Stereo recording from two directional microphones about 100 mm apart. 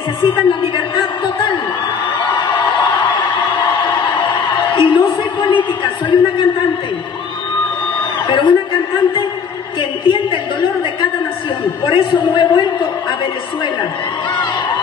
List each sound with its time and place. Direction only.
0.2 s a man's voice: 60° left (ahead or behind)
2.3 s a sound: 50° left (ahead or behind)
8.3 s a man's voice: 50° left (ahead or behind)
9.8 s a man's voice: 55° left (ahead or behind)
11.8 s a man's voice: 60° left (ahead or behind)